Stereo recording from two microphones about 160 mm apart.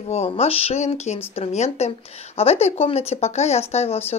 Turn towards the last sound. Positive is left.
turn(degrees=40)  # may be behind; listen again after turning